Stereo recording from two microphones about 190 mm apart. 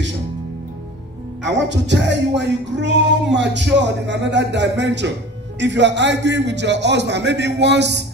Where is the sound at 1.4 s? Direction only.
70° right (ahead or behind).